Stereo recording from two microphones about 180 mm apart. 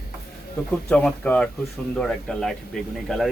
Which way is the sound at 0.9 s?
5° left (ahead or behind).